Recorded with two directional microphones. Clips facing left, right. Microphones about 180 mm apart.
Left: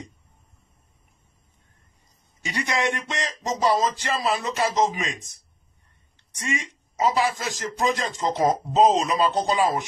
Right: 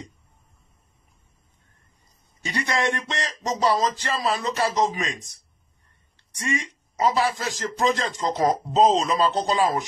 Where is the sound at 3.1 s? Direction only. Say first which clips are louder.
Even; 15° left (ahead or behind).